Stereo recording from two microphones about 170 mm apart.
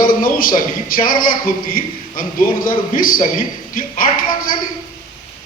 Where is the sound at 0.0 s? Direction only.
55° left (ahead or behind).